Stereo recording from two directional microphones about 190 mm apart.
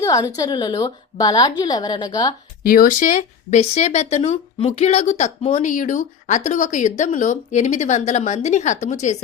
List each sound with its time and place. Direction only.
0.0 s a woman's voice: 20° left (ahead or behind)
2.6 s speech: 45° left (ahead or behind)